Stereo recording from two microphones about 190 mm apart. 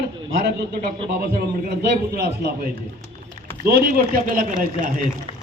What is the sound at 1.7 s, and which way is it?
Speech, 55° right (ahead or behind).